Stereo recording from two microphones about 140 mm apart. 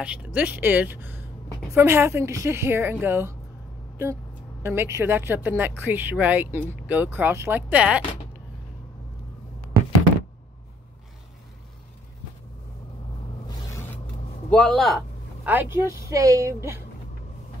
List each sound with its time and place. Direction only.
0.0 s speech: 10° right (ahead or behind)
4.6 s speech: 20° right (ahead or behind)
13.5 s vehicle: 20° left (ahead or behind)
14.5 s a man's voice: 5° left (ahead or behind)
15.4 s a woman's voice: 15° right (ahead or behind)